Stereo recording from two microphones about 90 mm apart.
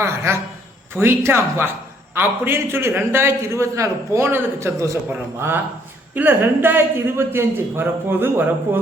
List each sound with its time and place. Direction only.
0.3 s a man's voice: 30° right (ahead or behind)
6.1 s a man's voice: 20° right (ahead or behind)